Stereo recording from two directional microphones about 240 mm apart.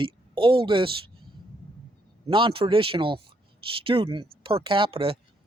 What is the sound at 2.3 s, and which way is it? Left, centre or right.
Speech, right.